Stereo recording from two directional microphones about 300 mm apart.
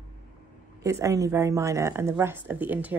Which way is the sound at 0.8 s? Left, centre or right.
Centre.